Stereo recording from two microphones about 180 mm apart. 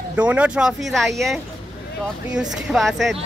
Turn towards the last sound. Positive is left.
turn(degrees=0)  # may be behind; listen again after turning